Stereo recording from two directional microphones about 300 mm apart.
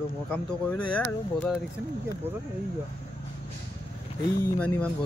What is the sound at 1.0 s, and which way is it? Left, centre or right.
Speech, centre.